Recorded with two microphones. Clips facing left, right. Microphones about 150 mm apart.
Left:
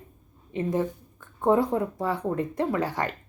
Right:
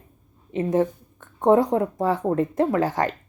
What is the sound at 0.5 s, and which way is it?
A woman's voice, 20° right (ahead or behind).